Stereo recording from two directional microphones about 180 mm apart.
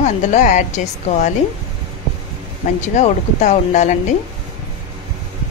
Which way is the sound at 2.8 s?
40° left (ahead or behind).